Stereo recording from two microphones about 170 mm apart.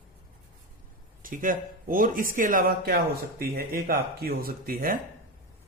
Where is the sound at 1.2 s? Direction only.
55° right (ahead or behind).